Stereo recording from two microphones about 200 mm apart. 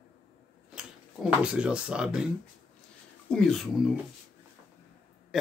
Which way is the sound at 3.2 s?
5° left (ahead or behind).